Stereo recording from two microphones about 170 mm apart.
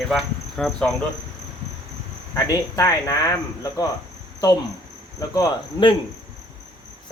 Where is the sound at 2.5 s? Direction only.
20° left (ahead or behind).